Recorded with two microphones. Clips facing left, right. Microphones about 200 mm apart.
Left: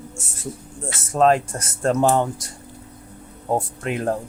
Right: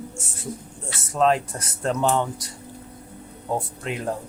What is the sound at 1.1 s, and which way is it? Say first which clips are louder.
Speech: left 3 dB; 45° left (ahead or behind).